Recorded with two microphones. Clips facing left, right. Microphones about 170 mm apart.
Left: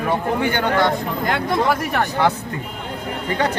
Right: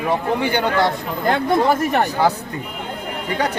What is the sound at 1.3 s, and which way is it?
Speech, 25° right (ahead or behind).